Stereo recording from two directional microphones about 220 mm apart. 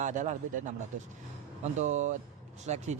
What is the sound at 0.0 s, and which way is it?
A man's voice, 35° right (ahead or behind).